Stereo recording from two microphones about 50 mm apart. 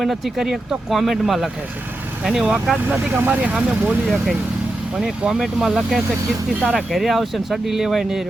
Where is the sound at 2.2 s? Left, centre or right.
Centre.